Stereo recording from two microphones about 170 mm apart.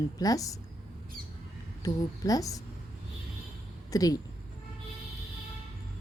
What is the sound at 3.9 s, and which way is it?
Speech, 20° left (ahead or behind).